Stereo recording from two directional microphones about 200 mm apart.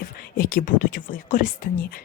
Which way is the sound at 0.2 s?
45° left (ahead or behind).